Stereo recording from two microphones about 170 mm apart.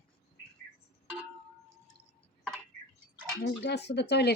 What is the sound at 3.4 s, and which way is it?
Speech, 85° left.